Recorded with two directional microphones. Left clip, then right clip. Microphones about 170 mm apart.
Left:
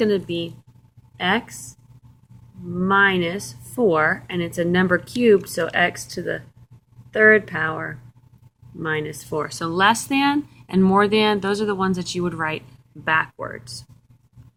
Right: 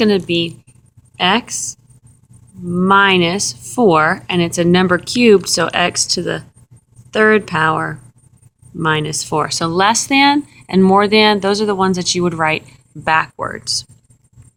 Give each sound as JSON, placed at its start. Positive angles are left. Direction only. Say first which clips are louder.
{"t": 0.0, "sound": "a woman's voice", "louder": "right 7 dB", "side_deg": -45}
{"t": 2.7, "sound": "a woman's voice", "louder": "right 6 dB", "side_deg": -45}